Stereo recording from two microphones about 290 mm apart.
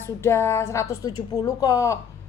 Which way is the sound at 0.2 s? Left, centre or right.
Centre.